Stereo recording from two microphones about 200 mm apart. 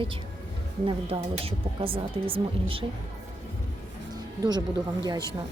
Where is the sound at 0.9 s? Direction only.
30° right (ahead or behind).